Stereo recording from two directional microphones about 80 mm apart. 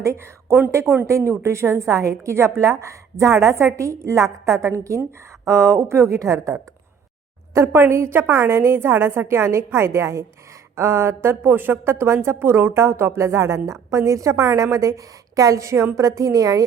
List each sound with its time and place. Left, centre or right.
0.0 s a woman's voice: right
7.5 s a woman's voice: right